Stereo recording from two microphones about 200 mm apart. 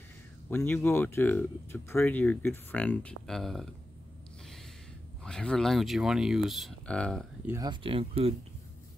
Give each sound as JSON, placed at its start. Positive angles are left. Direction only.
{"t": 0.5, "sound": "speech", "side_deg": 10}
{"t": 5.2, "sound": "speech", "side_deg": 5}
{"t": 7.4, "sound": "speech", "side_deg": -15}